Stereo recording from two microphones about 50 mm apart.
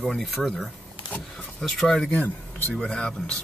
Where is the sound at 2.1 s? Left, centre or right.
Left.